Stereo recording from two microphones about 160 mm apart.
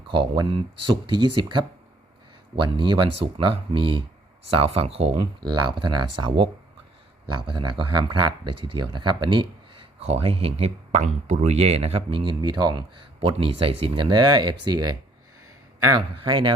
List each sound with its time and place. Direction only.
0.1 s speech: 30° right (ahead or behind)